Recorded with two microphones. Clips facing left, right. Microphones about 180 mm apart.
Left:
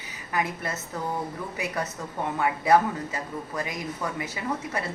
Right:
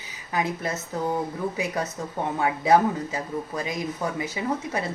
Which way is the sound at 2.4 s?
25° right (ahead or behind).